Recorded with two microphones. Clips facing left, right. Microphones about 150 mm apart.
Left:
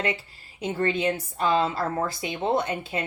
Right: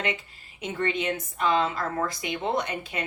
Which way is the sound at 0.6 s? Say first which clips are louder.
Left 3 dB; 35° left (ahead or behind).